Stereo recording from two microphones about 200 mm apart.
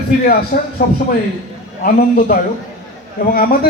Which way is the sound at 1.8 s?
45° left (ahead or behind).